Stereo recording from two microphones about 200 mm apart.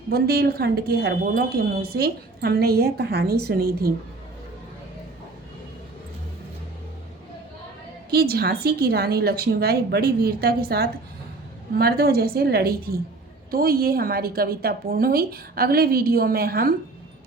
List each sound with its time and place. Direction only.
0.1 s speech: 50° right (ahead or behind)
8.1 s speech: 50° right (ahead or behind)